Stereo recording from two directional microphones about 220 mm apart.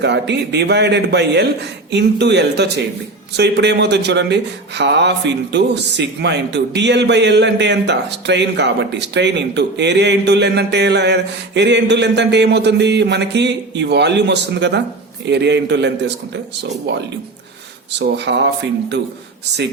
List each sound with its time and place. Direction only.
0.0 s speech: 50° right (ahead or behind)